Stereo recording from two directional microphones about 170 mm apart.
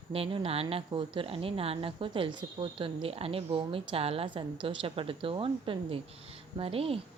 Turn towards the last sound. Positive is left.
turn(degrees=-35)  # may be behind; listen again after turning